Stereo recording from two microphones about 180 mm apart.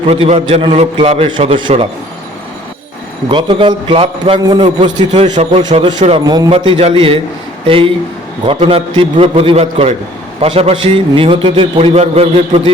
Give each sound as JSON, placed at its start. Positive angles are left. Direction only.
{"t": 0.1, "sound": "a man's voice", "side_deg": -35}
{"t": 3.2, "sound": "a man's voice", "side_deg": -30}
{"t": 8.4, "sound": "a man's voice", "side_deg": -35}